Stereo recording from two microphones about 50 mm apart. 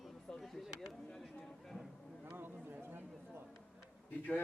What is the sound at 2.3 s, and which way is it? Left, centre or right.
Speech, right.